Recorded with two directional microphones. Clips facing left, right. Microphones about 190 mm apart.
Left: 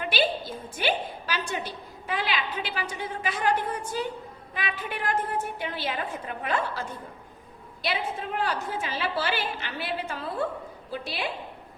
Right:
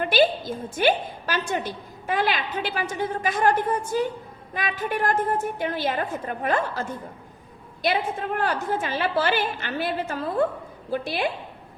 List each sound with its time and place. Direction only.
0.0 s a woman's voice: 45° right (ahead or behind)